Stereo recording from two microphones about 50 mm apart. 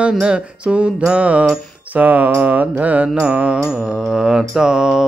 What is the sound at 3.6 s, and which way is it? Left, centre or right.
Mantra, centre.